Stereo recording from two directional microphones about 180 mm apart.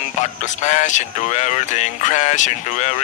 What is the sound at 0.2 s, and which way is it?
Speech, 40° left (ahead or behind).